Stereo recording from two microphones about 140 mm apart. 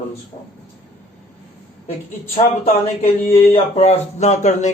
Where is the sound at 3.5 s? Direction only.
50° left (ahead or behind).